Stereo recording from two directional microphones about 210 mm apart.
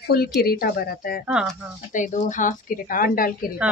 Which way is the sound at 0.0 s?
50° left (ahead or behind).